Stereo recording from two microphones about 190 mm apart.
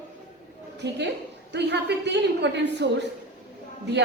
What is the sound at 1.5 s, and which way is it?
A woman's voice, 65° right (ahead or behind).